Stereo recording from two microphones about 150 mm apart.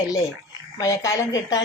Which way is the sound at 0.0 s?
20° left (ahead or behind).